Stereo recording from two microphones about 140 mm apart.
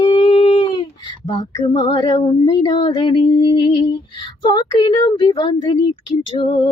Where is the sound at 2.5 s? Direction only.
30° left (ahead or behind).